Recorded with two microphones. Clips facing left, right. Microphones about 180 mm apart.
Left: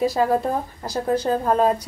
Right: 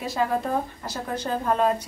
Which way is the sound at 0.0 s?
35° left (ahead or behind).